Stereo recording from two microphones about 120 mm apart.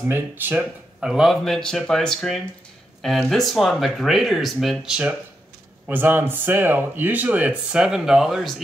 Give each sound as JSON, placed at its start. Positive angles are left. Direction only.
{"t": 0.0, "sound": "speech", "side_deg": -15}
{"t": 1.0, "sound": "speech", "side_deg": -5}
{"t": 5.9, "sound": "speech", "side_deg": -15}